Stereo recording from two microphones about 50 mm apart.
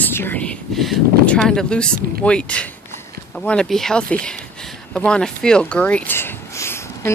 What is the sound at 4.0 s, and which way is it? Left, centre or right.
Speech, left.